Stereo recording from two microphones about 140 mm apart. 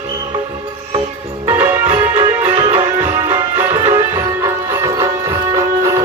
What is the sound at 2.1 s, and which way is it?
Music, 40° right (ahead or behind).